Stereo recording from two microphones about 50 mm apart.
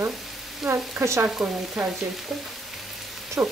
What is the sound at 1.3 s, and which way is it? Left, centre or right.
Frying, right.